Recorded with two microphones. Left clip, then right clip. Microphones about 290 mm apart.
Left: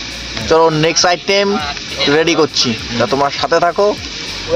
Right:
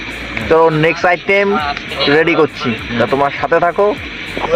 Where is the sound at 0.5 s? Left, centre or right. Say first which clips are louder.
Even; centre.